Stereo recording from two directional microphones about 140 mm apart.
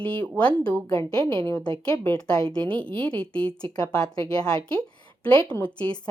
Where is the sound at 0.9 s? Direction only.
20° left (ahead or behind).